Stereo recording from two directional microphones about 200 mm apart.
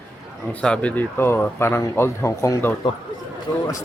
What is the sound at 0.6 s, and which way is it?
Speech, 5° left (ahead or behind).